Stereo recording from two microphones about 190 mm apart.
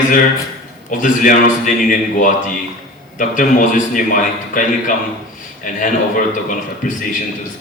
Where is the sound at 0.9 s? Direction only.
40° left (ahead or behind).